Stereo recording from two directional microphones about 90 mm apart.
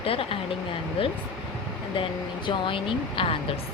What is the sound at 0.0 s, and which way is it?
Speech, 90° left.